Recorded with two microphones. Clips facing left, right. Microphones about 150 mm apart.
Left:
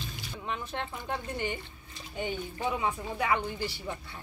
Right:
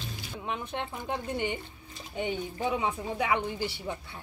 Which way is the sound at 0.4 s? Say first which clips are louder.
Right 1 dB; 15° right (ahead or behind).